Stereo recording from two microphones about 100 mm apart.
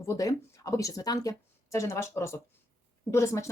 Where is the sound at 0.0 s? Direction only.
35° left (ahead or behind).